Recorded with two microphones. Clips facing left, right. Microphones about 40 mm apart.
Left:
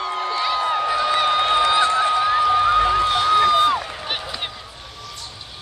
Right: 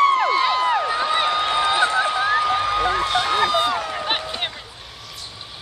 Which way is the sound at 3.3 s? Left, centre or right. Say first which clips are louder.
Left 5 dB; right.